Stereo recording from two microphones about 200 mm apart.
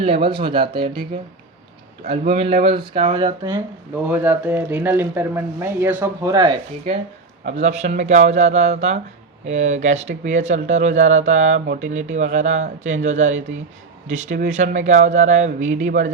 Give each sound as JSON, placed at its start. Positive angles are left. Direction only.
{"t": 0.0, "sound": "speech", "side_deg": -25}
{"t": 2.0, "sound": "speech", "side_deg": -30}
{"t": 7.5, "sound": "speech", "side_deg": -35}